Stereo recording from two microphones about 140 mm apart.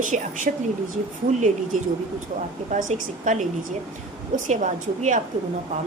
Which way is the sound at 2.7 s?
65° right (ahead or behind).